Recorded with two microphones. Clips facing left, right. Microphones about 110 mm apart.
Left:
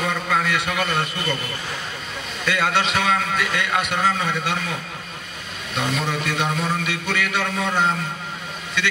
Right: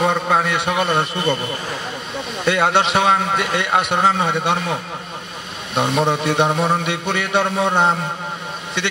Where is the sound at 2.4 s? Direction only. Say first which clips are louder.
Right 5 dB; 25° right (ahead or behind).